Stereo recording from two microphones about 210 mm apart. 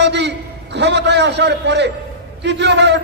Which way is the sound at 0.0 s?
55° right (ahead or behind).